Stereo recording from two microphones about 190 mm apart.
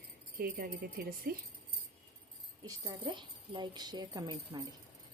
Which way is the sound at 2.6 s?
20° right (ahead or behind).